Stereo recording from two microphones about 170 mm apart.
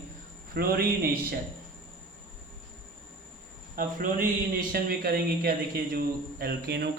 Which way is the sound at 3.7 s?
55° right (ahead or behind).